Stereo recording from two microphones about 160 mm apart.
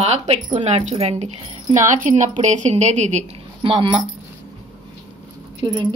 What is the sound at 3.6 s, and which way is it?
Speech, 35° right (ahead or behind).